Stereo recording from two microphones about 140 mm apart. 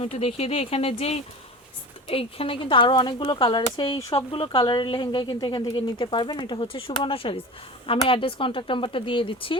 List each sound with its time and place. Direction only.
0.0 s speech: 45° left (ahead or behind)